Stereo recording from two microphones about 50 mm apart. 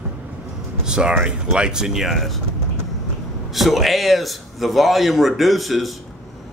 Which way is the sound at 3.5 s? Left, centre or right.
Centre.